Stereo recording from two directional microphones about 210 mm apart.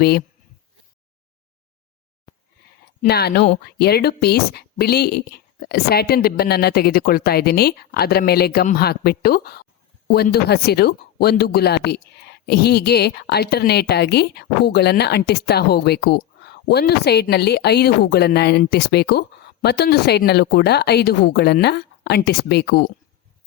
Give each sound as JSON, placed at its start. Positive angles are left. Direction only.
{"t": 3.1, "sound": "speech", "side_deg": 50}